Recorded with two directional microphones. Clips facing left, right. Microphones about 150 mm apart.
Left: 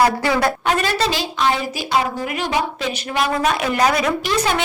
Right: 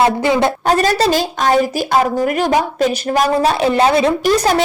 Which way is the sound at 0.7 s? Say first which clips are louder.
Right 9 dB; 40° right (ahead or behind).